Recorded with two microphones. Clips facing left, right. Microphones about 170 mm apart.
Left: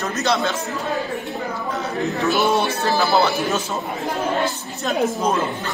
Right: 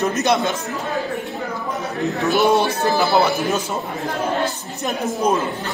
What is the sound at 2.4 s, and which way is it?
Speech, 20° right (ahead or behind).